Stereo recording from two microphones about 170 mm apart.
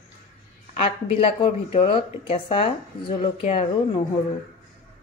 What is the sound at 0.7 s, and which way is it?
Speech, 35° left (ahead or behind).